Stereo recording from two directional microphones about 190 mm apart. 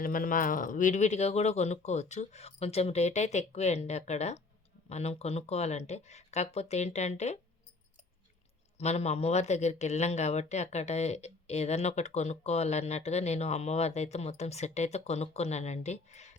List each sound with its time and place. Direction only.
0.0 s a man's voice: 45° left (ahead or behind)
8.8 s a man's voice: 35° left (ahead or behind)